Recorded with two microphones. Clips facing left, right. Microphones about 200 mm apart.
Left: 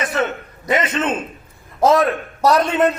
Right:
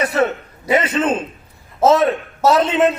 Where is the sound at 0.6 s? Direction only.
5° right (ahead or behind).